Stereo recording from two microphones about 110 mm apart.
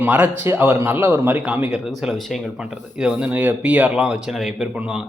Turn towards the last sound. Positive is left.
turn(degrees=-5)  # may be behind; listen again after turning